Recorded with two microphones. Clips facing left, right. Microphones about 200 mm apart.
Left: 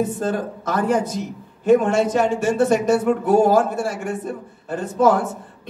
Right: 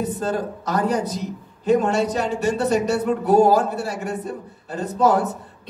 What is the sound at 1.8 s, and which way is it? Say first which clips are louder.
Speech: left 3 dB; 50° left (ahead or behind).